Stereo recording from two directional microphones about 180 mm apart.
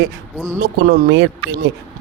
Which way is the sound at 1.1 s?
85° right.